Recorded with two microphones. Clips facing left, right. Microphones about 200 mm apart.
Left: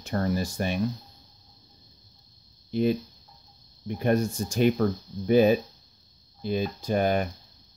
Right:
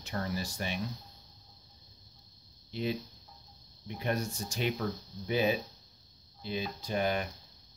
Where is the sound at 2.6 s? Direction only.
50° left (ahead or behind).